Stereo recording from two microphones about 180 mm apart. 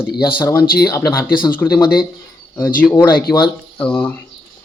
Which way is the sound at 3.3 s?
25° left (ahead or behind).